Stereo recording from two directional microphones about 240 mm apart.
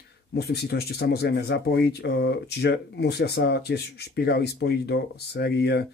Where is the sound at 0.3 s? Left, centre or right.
Left.